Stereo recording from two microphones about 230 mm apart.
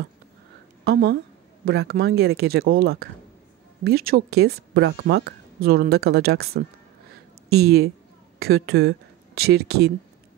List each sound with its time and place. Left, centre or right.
0.8 s speech: right